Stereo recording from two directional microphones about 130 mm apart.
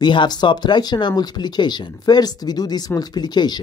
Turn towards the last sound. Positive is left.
turn(degrees=35)  # may be behind; listen again after turning